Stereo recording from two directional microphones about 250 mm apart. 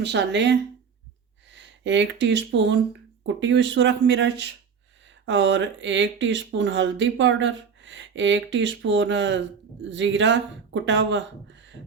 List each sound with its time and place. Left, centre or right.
0.0 s speech: right